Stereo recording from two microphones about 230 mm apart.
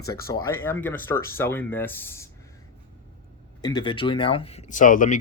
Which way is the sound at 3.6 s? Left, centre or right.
Centre.